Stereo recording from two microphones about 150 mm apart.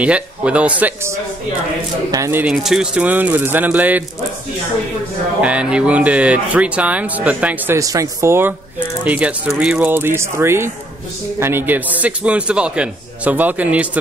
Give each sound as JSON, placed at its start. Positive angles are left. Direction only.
{"t": 0.0, "sound": "speech", "side_deg": -10}
{"t": 2.0, "sound": "speech", "side_deg": -20}
{"t": 2.5, "sound": "speech", "side_deg": -5}
{"t": 5.4, "sound": "speech", "side_deg": -10}